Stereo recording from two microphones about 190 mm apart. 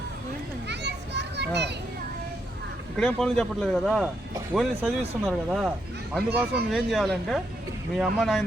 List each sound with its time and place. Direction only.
0.7 s children playing: 60° right (ahead or behind)
3.0 s speech: 5° left (ahead or behind)